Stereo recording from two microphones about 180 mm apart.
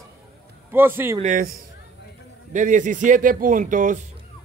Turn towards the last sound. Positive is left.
turn(degrees=-45)  # may be behind; listen again after turning